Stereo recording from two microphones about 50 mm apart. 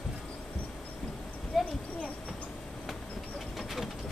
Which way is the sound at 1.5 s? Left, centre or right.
Centre.